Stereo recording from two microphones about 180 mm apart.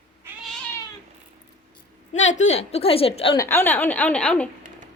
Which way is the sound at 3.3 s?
15° left (ahead or behind).